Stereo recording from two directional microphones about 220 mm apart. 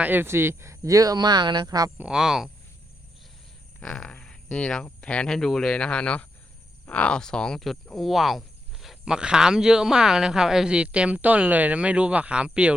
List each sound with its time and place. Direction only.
0.0 s speech: 10° right (ahead or behind)
2.0 s speech: 5° right (ahead or behind)
3.8 s speech: 5° left (ahead or behind)